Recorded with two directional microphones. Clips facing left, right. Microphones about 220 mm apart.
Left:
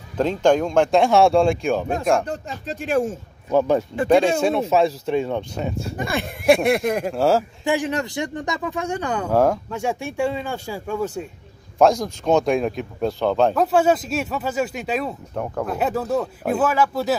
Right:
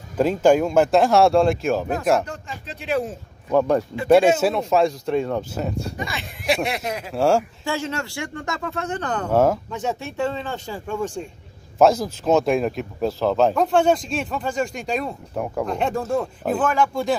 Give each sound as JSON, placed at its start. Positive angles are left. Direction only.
{"t": 0.2, "sound": "speech", "side_deg": -5}
{"t": 2.2, "sound": "speech", "side_deg": 40}
{"t": 3.4, "sound": "speech", "side_deg": 0}
{"t": 5.9, "sound": "speech", "side_deg": 55}
{"t": 7.2, "sound": "speech", "side_deg": 0}
{"t": 7.6, "sound": "speech", "side_deg": 15}
{"t": 9.3, "sound": "speech", "side_deg": 0}
{"t": 9.7, "sound": "speech", "side_deg": 10}
{"t": 11.8, "sound": "speech", "side_deg": -5}
{"t": 15.3, "sound": "speech", "side_deg": -10}
{"t": 15.6, "sound": "speech", "side_deg": 5}